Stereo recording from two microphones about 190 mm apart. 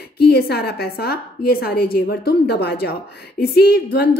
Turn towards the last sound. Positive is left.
turn(degrees=55)  # may be behind; listen again after turning